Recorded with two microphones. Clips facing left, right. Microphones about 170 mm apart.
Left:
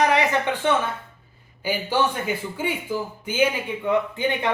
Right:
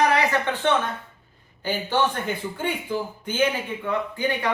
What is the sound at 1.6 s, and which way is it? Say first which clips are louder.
A man's voice: left 1 dB; 10° left (ahead or behind).